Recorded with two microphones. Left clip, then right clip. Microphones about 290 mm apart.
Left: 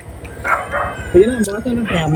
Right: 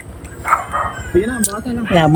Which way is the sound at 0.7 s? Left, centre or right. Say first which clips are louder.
Right 1 dB; right.